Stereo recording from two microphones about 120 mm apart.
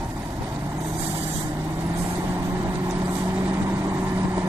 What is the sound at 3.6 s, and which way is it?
Vehicle, 25° right (ahead or behind).